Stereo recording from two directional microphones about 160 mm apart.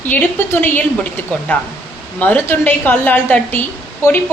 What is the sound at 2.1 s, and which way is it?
A woman's voice, 10° left (ahead or behind).